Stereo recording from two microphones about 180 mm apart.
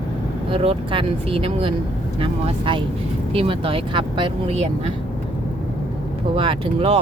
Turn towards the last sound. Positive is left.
turn(degrees=-30)  # may be behind; listen again after turning